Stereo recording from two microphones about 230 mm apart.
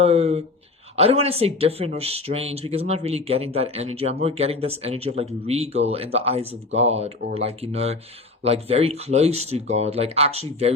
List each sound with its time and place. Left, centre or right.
0.0 s speech: right